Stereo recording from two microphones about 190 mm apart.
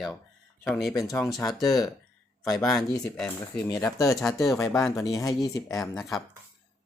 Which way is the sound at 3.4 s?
15° left (ahead or behind).